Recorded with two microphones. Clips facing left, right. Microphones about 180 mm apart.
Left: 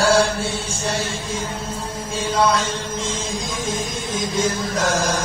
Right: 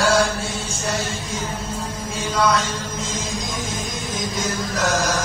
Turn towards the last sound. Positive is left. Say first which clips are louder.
# left 1 dB
turn(degrees=25)  # may be behind; listen again after turning